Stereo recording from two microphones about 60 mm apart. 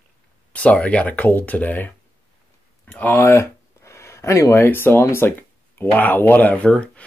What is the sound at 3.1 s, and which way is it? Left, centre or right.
Speech, left.